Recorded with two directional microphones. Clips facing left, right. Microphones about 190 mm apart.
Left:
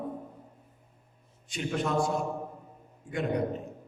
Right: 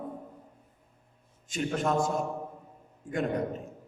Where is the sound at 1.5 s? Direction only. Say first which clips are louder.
Right 1 dB; 45° right (ahead or behind).